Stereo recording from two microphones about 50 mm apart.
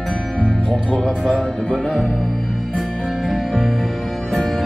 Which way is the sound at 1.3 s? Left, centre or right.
Centre.